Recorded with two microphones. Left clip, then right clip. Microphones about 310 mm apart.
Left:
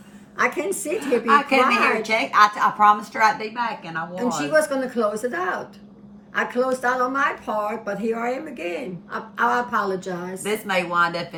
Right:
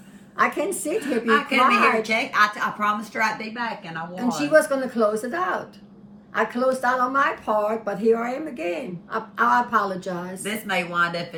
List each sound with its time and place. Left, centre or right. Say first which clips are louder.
0.3 s a woman's voice: even; centre
0.9 s a woman's voice: left 3 dB; centre
4.1 s a woman's voice: right 2 dB; centre
10.5 s a woman's voice: left 3 dB; centre